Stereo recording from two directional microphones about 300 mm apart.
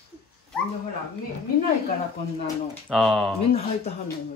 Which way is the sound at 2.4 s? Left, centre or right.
Centre.